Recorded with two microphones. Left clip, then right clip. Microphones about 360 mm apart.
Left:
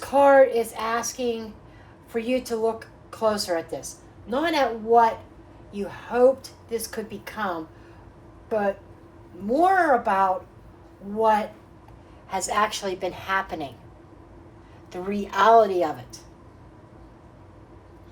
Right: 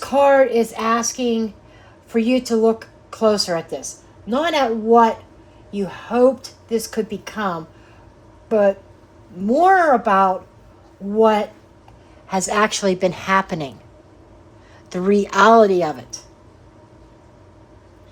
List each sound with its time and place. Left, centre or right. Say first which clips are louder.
0.0 s speech: right 2 dB; right
8.4 s speech: right 9 dB; right
12.3 s speech: right 5 dB; right
14.8 s speech: right 12 dB; right